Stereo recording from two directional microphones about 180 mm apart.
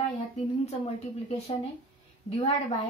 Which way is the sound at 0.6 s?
35° left (ahead or behind).